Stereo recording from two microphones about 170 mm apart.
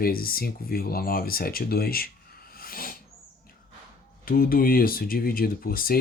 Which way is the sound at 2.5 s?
60° left (ahead or behind).